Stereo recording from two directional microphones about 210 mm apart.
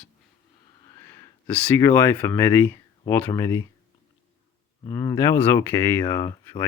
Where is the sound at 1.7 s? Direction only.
10° left (ahead or behind).